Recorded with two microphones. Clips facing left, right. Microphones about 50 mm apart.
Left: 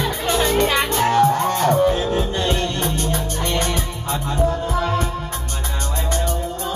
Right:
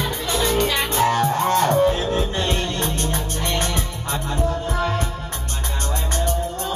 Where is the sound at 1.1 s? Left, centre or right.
Right.